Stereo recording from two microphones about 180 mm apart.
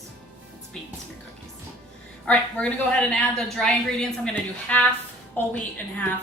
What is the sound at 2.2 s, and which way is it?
A woman's voice, 5° left (ahead or behind).